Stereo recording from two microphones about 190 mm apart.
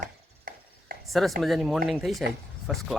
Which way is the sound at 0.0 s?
45° right (ahead or behind).